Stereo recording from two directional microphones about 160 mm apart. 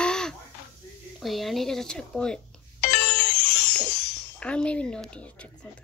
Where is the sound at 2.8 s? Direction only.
75° left (ahead or behind).